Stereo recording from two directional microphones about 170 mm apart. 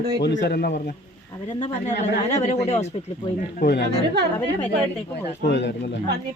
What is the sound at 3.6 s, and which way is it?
Speech, 75° left (ahead or behind).